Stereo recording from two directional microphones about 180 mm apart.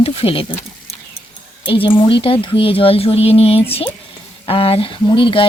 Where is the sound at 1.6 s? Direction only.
30° left (ahead or behind).